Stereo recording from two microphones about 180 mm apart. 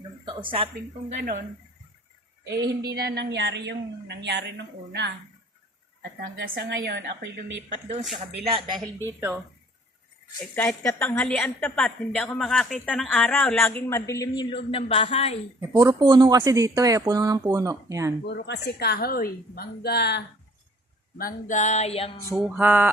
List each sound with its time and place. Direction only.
0.3 s speech: 30° right (ahead or behind)
1.1 s speech: 45° right (ahead or behind)
2.5 s speech: 20° right (ahead or behind)
2.9 s a woman's voice: 65° right (ahead or behind)
6.0 s a woman's voice: 60° right (ahead or behind)
8.4 s speech: 30° right (ahead or behind)
10.5 s a woman's voice: 15° left (ahead or behind)
14.5 s music: 30° left (ahead or behind)
15.7 s speech: 20° right (ahead or behind)
18.3 s a woman's voice: 70° left (ahead or behind)
21.2 s music: 50° left (ahead or behind); by 22.1 s 35° left (ahead or behind)
22.4 s a sound: 5° right (ahead or behind)